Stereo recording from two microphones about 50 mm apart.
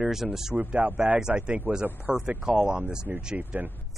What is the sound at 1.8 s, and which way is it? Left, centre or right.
Speech, right.